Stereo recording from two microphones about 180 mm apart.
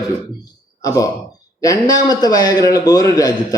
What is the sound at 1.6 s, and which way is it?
Speech, 20° left (ahead or behind).